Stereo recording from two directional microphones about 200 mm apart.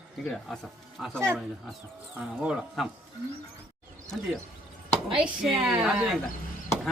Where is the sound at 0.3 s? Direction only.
5° left (ahead or behind).